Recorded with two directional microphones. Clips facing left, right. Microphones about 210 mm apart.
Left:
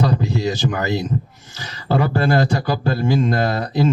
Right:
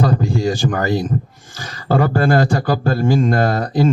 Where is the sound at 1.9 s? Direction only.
50° right (ahead or behind).